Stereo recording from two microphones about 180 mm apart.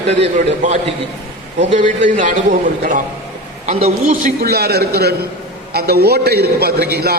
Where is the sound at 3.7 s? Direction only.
35° right (ahead or behind).